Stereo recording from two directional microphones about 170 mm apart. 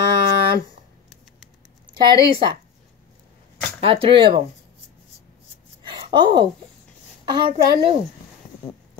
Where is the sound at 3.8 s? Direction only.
30° right (ahead or behind).